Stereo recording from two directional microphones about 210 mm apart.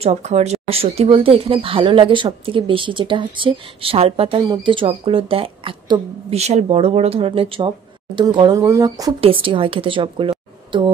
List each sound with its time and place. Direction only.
0.0 s speech: 30° right (ahead or behind)